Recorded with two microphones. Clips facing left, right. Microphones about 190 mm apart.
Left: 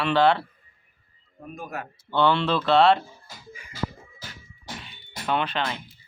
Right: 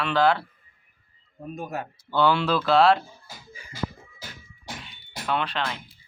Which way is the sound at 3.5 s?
30° right (ahead or behind).